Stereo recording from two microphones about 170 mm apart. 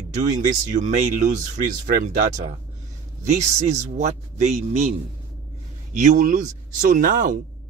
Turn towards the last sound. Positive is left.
turn(degrees=-50)  # may be behind; listen again after turning